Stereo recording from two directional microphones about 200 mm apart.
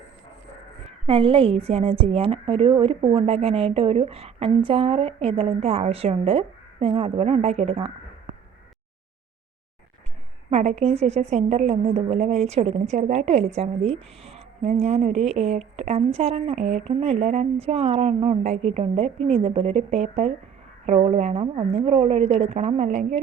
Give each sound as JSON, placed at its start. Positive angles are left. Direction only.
{"t": 1.0, "sound": "a woman's voice", "side_deg": -25}
{"t": 10.5, "sound": "speech", "side_deg": -35}